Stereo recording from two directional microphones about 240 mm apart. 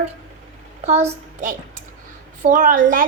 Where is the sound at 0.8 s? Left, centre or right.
Right.